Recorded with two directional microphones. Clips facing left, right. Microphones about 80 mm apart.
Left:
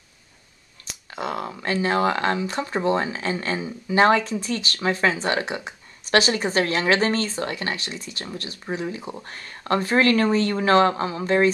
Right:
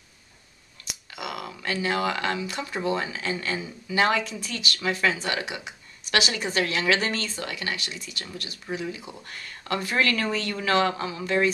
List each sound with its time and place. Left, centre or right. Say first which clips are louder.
0.8 s speech: left 6 dB; left